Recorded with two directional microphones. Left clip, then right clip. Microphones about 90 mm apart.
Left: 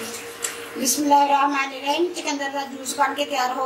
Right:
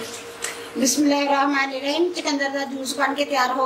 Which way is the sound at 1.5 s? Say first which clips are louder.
Right 1 dB; 75° right (ahead or behind).